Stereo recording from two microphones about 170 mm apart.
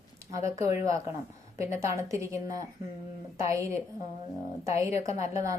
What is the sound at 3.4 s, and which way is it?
A woman's voice, 15° right (ahead or behind).